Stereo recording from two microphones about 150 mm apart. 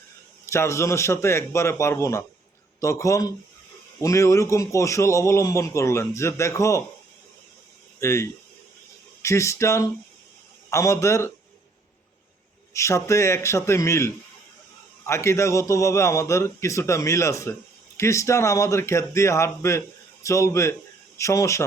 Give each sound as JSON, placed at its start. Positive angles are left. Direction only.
{"t": 0.4, "sound": "a man's voice", "side_deg": 20}
{"t": 7.9, "sound": "a man's voice", "side_deg": 20}
{"t": 12.7, "sound": "a man's voice", "side_deg": 20}